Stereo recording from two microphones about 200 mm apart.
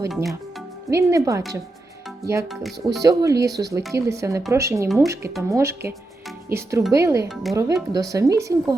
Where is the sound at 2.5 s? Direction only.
Centre (ahead or behind).